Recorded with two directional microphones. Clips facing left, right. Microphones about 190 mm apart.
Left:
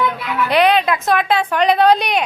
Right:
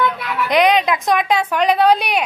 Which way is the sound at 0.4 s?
15° right (ahead or behind).